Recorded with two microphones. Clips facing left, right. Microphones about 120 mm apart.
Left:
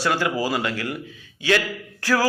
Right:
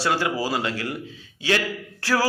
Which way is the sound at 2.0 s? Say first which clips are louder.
Left 1 dB; 30° right (ahead or behind).